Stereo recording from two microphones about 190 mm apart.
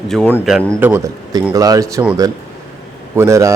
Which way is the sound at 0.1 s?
10° left (ahead or behind).